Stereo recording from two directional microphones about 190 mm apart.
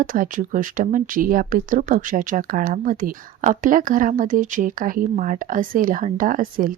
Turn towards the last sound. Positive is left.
turn(degrees=-45)  # may be behind; listen again after turning